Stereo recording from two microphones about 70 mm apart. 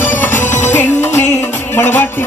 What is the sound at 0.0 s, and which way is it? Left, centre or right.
Music, left.